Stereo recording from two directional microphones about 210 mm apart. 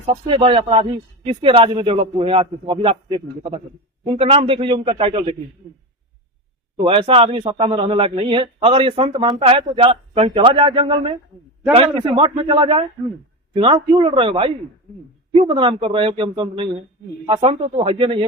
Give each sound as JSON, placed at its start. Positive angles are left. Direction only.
{"t": 0.0, "sound": "speech", "side_deg": -25}
{"t": 6.8, "sound": "speech", "side_deg": -25}